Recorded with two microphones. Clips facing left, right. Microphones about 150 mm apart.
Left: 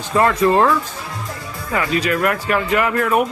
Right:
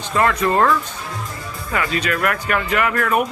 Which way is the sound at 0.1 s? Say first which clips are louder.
Left 3 dB; 25° left (ahead or behind).